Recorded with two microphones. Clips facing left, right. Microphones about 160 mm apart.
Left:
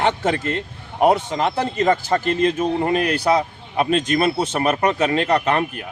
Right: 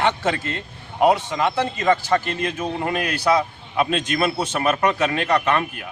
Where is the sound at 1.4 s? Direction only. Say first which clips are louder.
Left 2 dB; 35° left (ahead or behind).